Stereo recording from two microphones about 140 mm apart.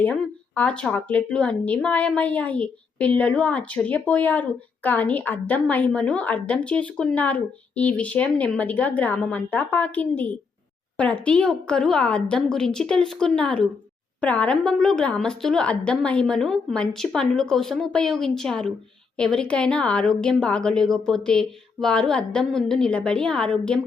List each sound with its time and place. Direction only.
0.0 s a woman's voice: 10° left (ahead or behind)